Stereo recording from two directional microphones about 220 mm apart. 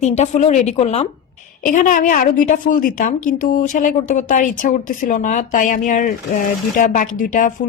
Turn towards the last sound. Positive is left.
turn(degrees=35)  # may be behind; listen again after turning